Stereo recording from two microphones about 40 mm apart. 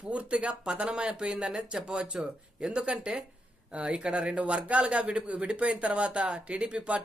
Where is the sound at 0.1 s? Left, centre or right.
Right.